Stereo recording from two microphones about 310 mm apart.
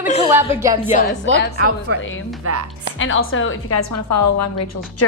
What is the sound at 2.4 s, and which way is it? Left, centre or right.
Speech, right.